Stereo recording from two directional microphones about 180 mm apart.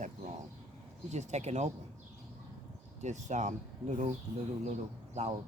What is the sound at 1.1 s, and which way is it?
Speech, 40° right (ahead or behind).